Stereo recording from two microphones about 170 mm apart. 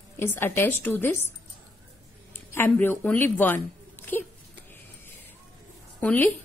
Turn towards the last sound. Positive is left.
turn(degrees=10)  # may be behind; listen again after turning